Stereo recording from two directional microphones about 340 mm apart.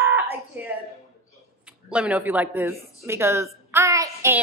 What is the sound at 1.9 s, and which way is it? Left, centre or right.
A woman's voice, centre.